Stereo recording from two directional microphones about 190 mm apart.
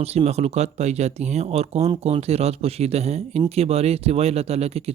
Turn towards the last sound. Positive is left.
turn(degrees=-35)  # may be behind; listen again after turning